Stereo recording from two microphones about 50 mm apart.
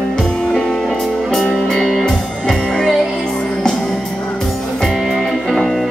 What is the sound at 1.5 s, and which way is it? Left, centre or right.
Music, centre.